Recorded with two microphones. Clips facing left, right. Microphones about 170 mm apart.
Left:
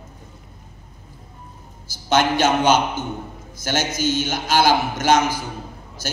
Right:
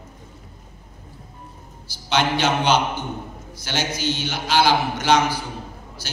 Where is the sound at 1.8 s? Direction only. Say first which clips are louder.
Left 3 dB; 45° left (ahead or behind).